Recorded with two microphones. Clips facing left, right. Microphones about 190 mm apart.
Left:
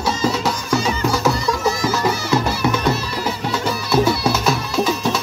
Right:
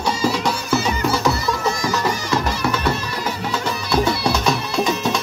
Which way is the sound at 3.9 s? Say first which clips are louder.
Left 2 dB; 5° left (ahead or behind).